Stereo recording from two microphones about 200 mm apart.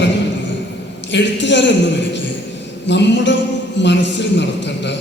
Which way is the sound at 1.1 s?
60° left (ahead or behind).